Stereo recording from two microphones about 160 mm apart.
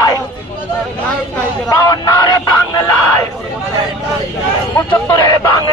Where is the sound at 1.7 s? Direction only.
25° left (ahead or behind).